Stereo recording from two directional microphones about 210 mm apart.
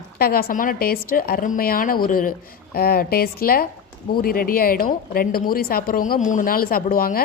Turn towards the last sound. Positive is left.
turn(degrees=45)  # may be behind; listen again after turning